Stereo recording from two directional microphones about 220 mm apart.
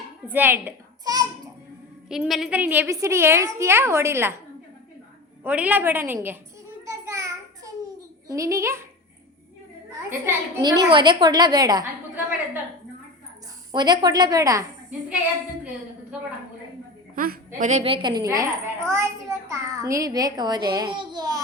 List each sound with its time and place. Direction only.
0.3 s a child's voice: 10° right (ahead or behind)
2.0 s a child's voice: centre (ahead or behind)
5.4 s a child's voice: 5° right (ahead or behind)
6.8 s a sound: 15° right (ahead or behind)
8.3 s a child's voice: 15° right (ahead or behind)
10.1 s a woman's voice: 15° right (ahead or behind)
13.7 s a child's voice: 20° right (ahead or behind)
17.2 s a woman's voice: 40° right (ahead or behind); by 21.4 s 20° right (ahead or behind)